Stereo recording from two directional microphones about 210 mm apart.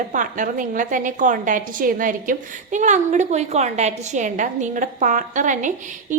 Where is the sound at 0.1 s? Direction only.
40° right (ahead or behind).